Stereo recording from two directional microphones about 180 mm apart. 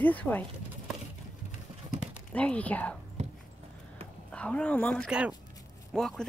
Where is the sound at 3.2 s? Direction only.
35° right (ahead or behind).